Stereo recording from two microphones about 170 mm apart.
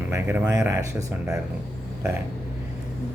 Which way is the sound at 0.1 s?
15° right (ahead or behind).